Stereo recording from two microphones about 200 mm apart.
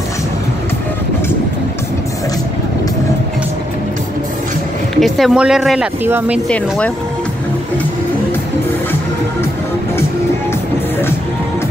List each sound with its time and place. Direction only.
5.0 s speech: centre (ahead or behind)